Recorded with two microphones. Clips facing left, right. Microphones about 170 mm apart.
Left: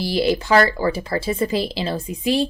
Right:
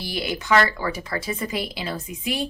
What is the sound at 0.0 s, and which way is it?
Speech, 30° left (ahead or behind).